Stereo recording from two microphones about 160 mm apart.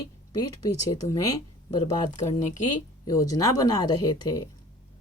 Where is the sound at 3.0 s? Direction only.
20° left (ahead or behind).